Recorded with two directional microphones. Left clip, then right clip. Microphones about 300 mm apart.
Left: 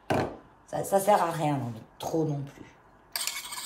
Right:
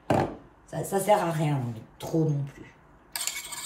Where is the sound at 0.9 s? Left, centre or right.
Centre.